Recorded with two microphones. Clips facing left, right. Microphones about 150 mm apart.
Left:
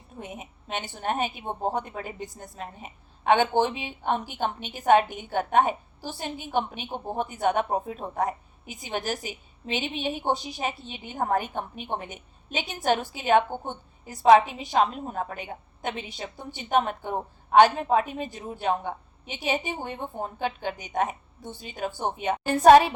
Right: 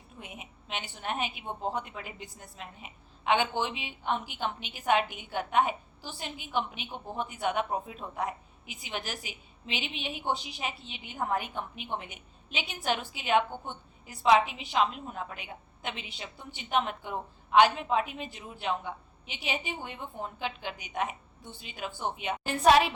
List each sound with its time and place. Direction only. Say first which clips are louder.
0.2 s a woman's voice: left 7 dB; 40° left (ahead or behind)